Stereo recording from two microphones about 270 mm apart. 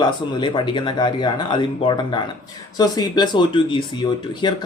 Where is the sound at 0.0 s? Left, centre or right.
Centre.